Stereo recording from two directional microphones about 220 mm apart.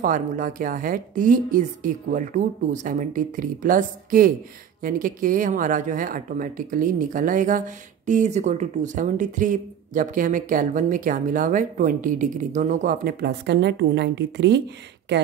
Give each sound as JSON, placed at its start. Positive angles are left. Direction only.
{"t": 0.0, "sound": "speech", "side_deg": -40}